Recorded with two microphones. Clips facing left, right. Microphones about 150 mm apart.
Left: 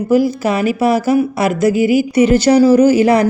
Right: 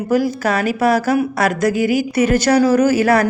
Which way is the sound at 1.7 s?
45° right (ahead or behind).